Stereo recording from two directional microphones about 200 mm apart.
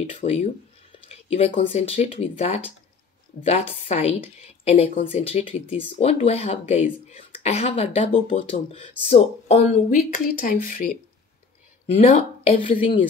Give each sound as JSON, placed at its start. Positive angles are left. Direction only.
{"t": 0.0, "sound": "a woman's voice", "side_deg": 30}
{"t": 9.9, "sound": "speech", "side_deg": 45}
{"t": 12.1, "sound": "a woman's voice", "side_deg": 40}